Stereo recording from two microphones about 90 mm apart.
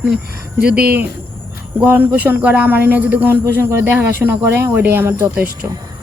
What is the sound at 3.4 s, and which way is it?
Speech, 30° right (ahead or behind).